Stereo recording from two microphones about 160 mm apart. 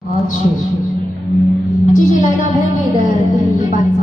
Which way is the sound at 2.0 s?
50° left (ahead or behind).